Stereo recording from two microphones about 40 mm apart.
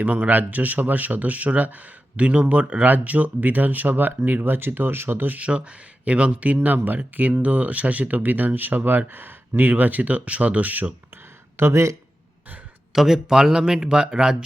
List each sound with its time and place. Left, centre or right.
0.0 s speech: right
5.4 s speech: right
6.7 s speech: right
7.3 s speech: right
11.6 s speech: right
12.9 s speech: centre; by 14.3 s right